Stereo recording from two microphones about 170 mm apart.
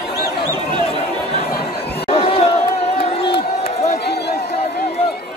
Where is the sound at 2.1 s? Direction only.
40° left (ahead or behind).